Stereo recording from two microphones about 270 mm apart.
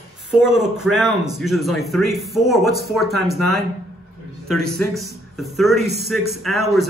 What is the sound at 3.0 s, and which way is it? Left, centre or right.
Speech, right.